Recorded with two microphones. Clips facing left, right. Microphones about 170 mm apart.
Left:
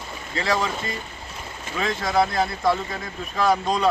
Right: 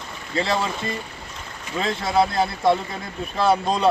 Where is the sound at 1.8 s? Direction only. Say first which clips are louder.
Right 1 dB; 25° right (ahead or behind).